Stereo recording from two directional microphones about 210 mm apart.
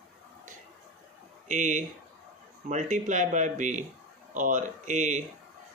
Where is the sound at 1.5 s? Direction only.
35° right (ahead or behind).